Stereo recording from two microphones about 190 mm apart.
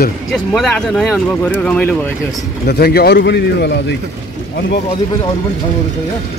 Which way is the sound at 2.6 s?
60° left (ahead or behind).